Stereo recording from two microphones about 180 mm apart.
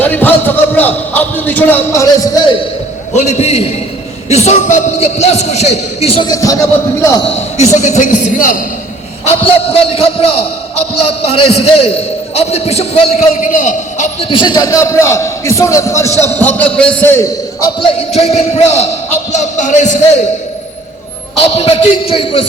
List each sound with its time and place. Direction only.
0.0 s a man's voice: 10° left (ahead or behind)
3.2 s a man's voice: 40° left (ahead or behind); by 6.6 s 20° left (ahead or behind)
7.8 s a man's voice: 40° left (ahead or behind)
9.2 s a man's voice: 35° left (ahead or behind)
11.3 s a man's voice: 35° left (ahead or behind)
14.3 s a man's voice: 25° left (ahead or behind)
16.1 s a man's voice: 20° right (ahead or behind)
16.4 s a man's voice: 10° left (ahead or behind)
17.7 s a man's voice: 30° left (ahead or behind)
21.5 s a man's voice: 35° left (ahead or behind)